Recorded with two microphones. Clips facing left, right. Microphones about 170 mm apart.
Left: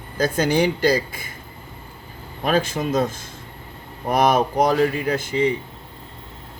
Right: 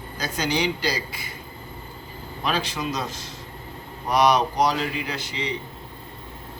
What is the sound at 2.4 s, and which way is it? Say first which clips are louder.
Speech: left 6 dB; 50° left (ahead or behind).